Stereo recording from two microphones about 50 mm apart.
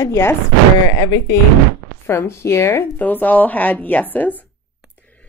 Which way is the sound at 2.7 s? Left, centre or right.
Left.